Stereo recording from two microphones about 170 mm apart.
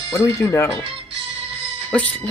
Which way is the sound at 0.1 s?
15° left (ahead or behind).